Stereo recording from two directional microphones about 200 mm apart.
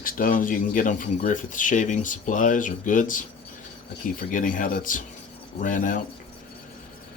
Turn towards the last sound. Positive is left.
turn(degrees=40)  # may be behind; listen again after turning